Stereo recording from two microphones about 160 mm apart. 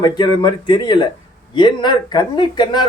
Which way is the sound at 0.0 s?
30° left (ahead or behind).